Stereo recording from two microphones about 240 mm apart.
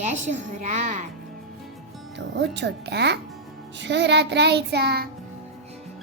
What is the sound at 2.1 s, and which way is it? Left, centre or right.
Speech, right.